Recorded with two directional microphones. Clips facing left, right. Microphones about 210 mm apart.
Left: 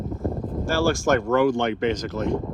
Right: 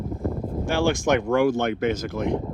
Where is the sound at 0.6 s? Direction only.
15° right (ahead or behind).